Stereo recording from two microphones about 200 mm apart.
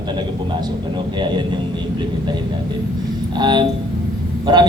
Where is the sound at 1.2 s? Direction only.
25° right (ahead or behind).